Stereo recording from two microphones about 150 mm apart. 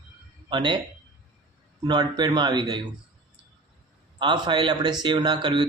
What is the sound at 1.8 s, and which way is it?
A man's voice, 30° right (ahead or behind).